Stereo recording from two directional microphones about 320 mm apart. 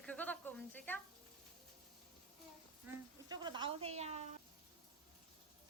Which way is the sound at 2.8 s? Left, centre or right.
Centre.